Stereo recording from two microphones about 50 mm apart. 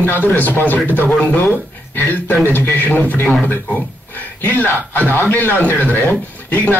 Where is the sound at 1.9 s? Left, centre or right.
Left.